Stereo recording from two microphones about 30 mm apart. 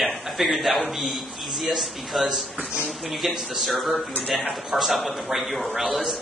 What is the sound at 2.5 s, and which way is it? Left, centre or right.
Speech, right.